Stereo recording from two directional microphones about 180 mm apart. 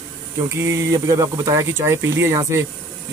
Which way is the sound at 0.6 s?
15° right (ahead or behind).